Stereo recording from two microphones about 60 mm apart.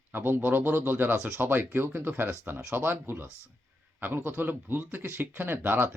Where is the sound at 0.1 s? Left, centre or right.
Right.